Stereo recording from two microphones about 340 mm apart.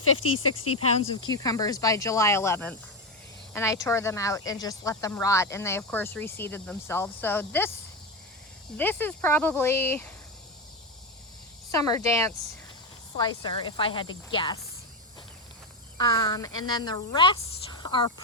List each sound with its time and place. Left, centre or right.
0.0 s speech: left
1.1 s speech: centre
8.8 s speech: centre
11.7 s speech: centre
16.0 s speech: centre